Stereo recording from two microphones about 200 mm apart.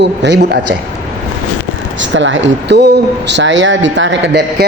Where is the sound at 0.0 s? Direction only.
60° right (ahead or behind).